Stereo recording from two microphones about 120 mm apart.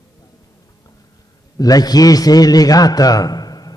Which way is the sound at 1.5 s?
30° left (ahead or behind).